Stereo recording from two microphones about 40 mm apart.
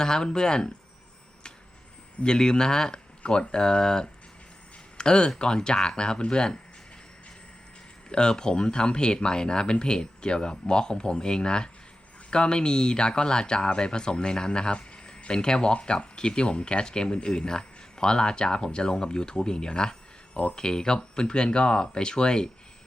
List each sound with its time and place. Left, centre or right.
0.0 s speech: centre
2.2 s speech: centre
8.1 s speech: left